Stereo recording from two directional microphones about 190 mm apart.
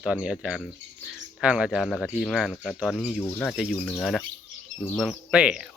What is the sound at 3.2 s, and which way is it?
Speech, 15° left (ahead or behind).